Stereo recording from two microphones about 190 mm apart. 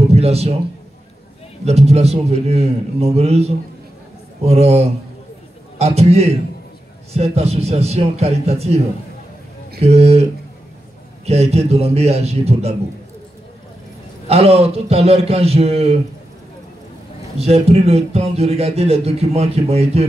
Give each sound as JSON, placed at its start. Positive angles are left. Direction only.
{"t": 0.1, "sound": "a man's voice", "side_deg": -35}
{"t": 1.6, "sound": "speech", "side_deg": -35}
{"t": 11.2, "sound": "speech", "side_deg": -35}
{"t": 14.2, "sound": "speech", "side_deg": -30}
{"t": 17.4, "sound": "speech", "side_deg": -35}